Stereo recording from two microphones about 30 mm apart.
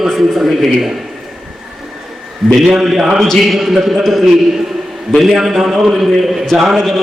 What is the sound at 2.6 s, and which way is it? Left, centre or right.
A man's voice, centre.